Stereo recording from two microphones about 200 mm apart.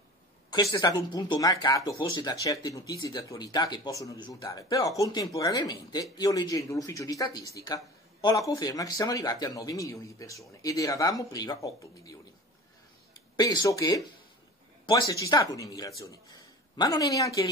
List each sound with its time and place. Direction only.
0.5 s speech: 20° left (ahead or behind)
13.4 s speech: 20° left (ahead or behind)